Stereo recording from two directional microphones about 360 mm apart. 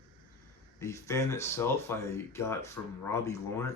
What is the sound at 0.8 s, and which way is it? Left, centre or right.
Speech, centre.